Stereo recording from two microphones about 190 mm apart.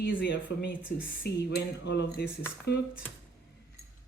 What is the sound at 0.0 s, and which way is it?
A man's voice, 70° left (ahead or behind).